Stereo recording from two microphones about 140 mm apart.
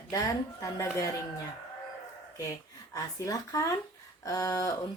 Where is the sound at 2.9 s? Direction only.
25° left (ahead or behind).